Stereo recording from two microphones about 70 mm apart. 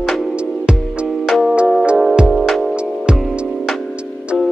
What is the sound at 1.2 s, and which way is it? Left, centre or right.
Music, centre.